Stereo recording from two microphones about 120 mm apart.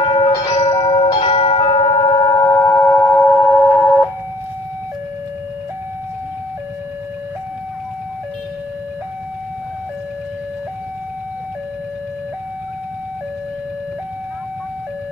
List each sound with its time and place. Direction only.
0.0 s music: 30° left (ahead or behind)
0.7 s tubular bells: 35° left (ahead or behind); by 4.1 s 10° left (ahead or behind)